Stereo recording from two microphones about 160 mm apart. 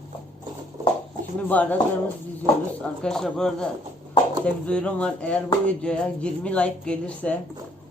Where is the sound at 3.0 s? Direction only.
5° left (ahead or behind).